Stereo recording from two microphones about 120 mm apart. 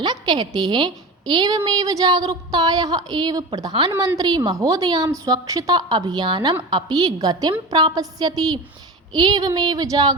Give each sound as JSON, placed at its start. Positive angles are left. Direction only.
{"t": 0.0, "sound": "a woman's voice", "side_deg": -35}